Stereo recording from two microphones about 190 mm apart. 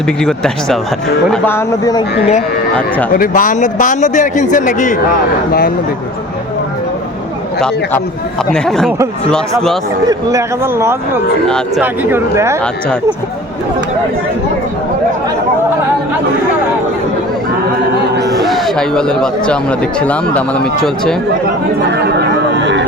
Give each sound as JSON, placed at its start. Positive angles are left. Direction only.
{"t": 0.2, "sound": "speech", "side_deg": 5}
{"t": 3.1, "sound": "a man's voice", "side_deg": 45}
{"t": 5.5, "sound": "a man's voice", "side_deg": 55}
{"t": 8.5, "sound": "speech", "side_deg": 5}
{"t": 10.1, "sound": "a man's voice", "side_deg": -15}
{"t": 11.4, "sound": "speech", "side_deg": 5}
{"t": 11.8, "sound": "a man's voice", "side_deg": -10}
{"t": 18.2, "sound": "a sound", "side_deg": -20}
{"t": 18.4, "sound": "a man's voice", "side_deg": 0}
{"t": 21.8, "sound": "speech", "side_deg": -60}